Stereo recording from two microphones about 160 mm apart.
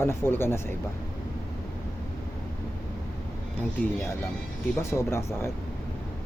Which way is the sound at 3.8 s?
15° left (ahead or behind).